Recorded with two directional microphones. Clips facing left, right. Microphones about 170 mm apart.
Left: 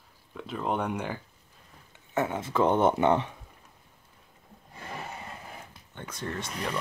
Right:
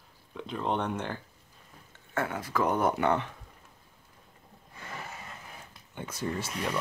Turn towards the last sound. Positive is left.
turn(degrees=-5)  # may be behind; listen again after turning